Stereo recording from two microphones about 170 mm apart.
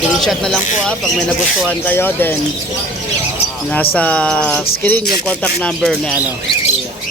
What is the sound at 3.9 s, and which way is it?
Music, 5° left (ahead or behind).